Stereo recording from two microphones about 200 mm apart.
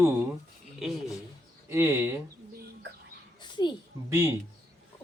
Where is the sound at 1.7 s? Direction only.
10° right (ahead or behind).